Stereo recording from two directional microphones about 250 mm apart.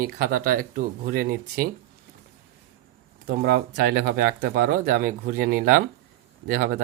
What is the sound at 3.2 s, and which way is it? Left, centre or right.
Speech, right.